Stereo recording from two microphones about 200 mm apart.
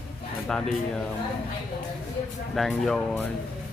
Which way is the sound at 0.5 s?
5° left (ahead or behind).